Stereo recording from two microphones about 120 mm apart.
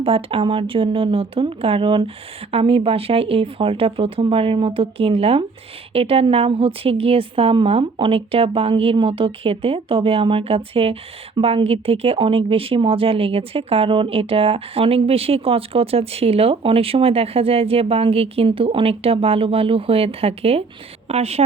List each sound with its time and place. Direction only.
0.0 s a woman's voice: 50° right (ahead or behind)